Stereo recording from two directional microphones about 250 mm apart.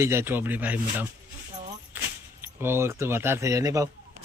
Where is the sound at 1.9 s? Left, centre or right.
Centre.